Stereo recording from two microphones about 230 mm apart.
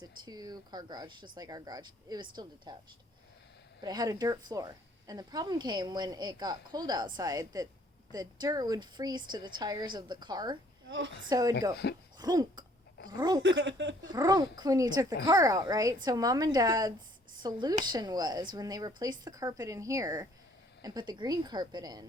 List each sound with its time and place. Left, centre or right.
0.0 s a woman's voice: centre
3.8 s speech: centre
10.8 s speech: right
11.3 s speech: centre
12.1 s throat clearing: centre
13.1 s speech: centre
13.4 s speech: right
14.0 s a woman's voice: centre